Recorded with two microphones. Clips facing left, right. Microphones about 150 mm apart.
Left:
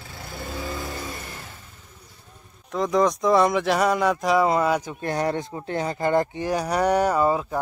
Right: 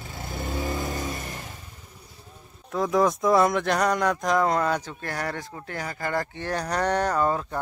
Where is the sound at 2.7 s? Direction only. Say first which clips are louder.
Left 1 dB; 5° right (ahead or behind).